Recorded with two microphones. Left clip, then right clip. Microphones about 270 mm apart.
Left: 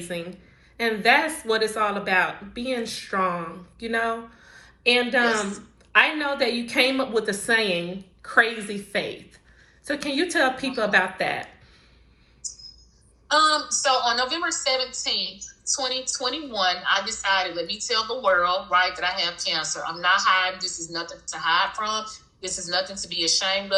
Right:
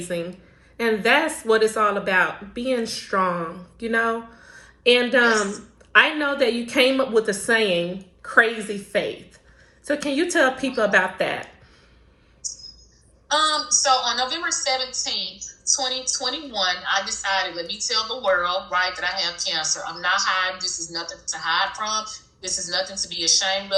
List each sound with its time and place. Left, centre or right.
0.8 s speech: centre
5.3 s a woman's voice: centre
5.9 s speech: centre
7.1 s a woman's voice: left
7.4 s speech: centre
13.2 s a woman's voice: centre